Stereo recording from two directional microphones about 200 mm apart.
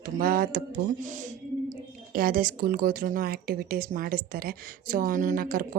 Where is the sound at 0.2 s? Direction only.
45° right (ahead or behind).